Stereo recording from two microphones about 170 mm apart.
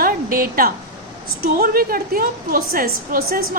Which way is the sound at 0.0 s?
55° right (ahead or behind).